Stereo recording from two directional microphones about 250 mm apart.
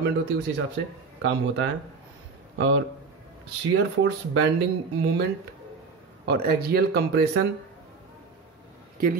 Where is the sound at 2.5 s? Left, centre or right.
Right.